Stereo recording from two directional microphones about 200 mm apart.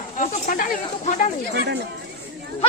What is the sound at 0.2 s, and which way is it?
Speech, 45° left (ahead or behind).